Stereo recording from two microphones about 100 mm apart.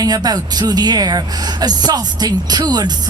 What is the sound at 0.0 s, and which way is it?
Speech, 40° right (ahead or behind).